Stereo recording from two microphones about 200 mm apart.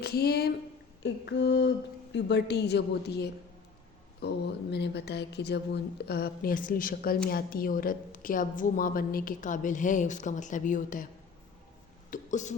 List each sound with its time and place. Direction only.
0.0 s a woman's voice: 50° left (ahead or behind)
12.1 s speech: 35° left (ahead or behind)